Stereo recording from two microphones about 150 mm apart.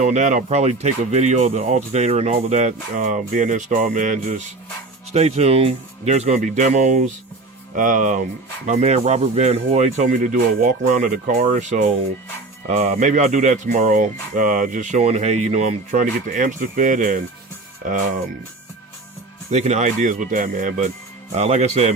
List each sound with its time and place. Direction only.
0.0 s speech: 50° right (ahead or behind)
5.1 s speech: 45° right (ahead or behind)
8.6 s speech: 50° right (ahead or behind); by 17.2 s 65° right (ahead or behind)
19.5 s speech: 50° right (ahead or behind)
21.3 s speech: 45° right (ahead or behind)